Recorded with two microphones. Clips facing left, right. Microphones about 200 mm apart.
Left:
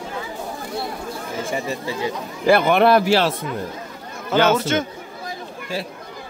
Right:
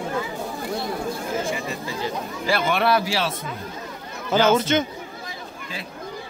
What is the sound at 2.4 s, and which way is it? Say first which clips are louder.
Speech: left 7 dB; 55° left (ahead or behind).